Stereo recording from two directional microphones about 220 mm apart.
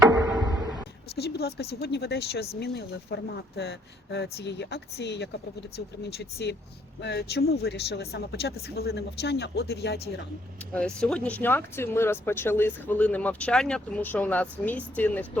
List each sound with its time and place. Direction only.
0.3 s a sound: centre (ahead or behind)
1.1 s speech: 45° left (ahead or behind)
10.8 s speech: 5° left (ahead or behind)